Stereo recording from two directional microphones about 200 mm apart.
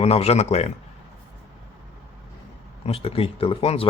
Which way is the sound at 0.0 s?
30° left (ahead or behind).